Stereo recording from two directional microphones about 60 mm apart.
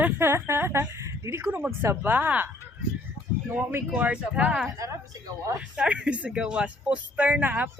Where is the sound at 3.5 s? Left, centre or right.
Right.